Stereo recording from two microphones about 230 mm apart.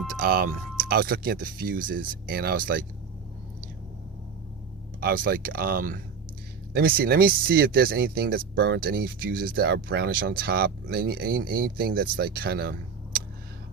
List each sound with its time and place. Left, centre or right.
0.2 s speech: right
4.9 s speech: right